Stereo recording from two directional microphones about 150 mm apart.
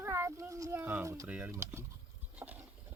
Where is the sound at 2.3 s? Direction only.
10° right (ahead or behind).